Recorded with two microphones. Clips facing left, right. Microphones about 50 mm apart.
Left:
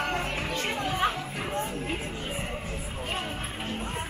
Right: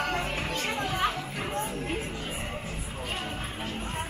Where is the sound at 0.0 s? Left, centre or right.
Centre.